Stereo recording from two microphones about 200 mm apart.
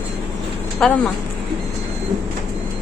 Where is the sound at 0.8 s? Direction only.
5° left (ahead or behind).